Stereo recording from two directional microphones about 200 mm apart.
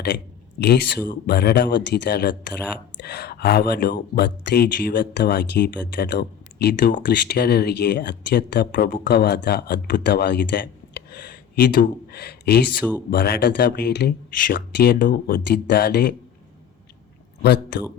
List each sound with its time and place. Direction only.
0.6 s speech: 55° left (ahead or behind)
17.4 s speech: 55° left (ahead or behind)